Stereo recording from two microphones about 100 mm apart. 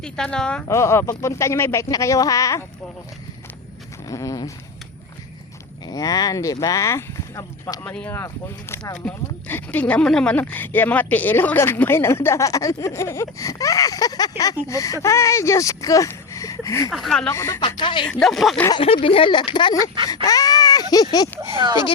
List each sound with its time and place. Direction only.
0.0 s a woman's voice: 5° left (ahead or behind)
0.7 s speech: 30° left (ahead or behind)
4.1 s speech: 35° left (ahead or behind)
5.9 s speech: 40° left (ahead or behind)
7.9 s speech: 20° left (ahead or behind)
9.0 s speech: 5° left (ahead or behind)
9.5 s speech: 20° left (ahead or behind)
16.9 s speech: 5° left (ahead or behind)
17.2 s speech: 30° left (ahead or behind)
17.6 s speech: 55° left (ahead or behind)
18.2 s speech: centre (ahead or behind)
18.8 s speech: 65° left (ahead or behind); by 19.7 s 50° left (ahead or behind)
20.2 s speech: 40° left (ahead or behind)